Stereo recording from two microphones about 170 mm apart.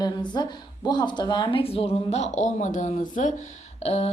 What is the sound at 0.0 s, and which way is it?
A woman's voice, 25° left (ahead or behind).